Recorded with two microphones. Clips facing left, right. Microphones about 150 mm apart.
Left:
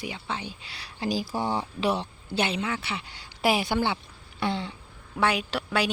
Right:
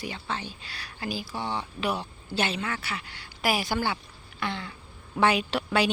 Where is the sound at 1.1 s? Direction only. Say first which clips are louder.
Left 5 dB; 40° left (ahead or behind).